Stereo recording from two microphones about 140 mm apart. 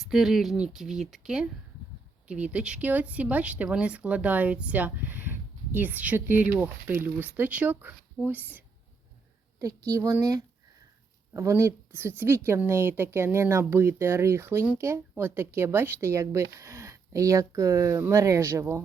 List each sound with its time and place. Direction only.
0.0 s speech: centre (ahead or behind)
9.6 s speech: 25° right (ahead or behind)